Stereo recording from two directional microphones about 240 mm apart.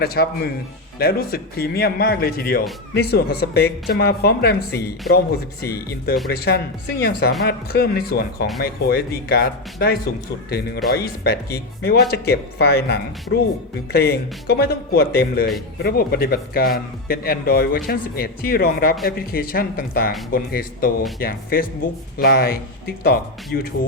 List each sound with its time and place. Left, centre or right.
0.0 s speech: left